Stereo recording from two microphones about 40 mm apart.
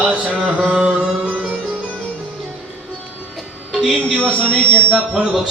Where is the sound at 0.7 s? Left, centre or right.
Right.